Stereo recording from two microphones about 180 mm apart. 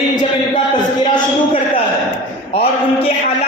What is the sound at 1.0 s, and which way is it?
A man's voice, 30° left (ahead or behind).